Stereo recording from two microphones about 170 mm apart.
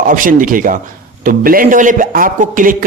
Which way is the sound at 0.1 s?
55° right (ahead or behind).